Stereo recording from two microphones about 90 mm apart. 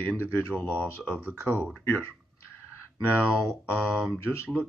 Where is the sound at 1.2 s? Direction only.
25° right (ahead or behind).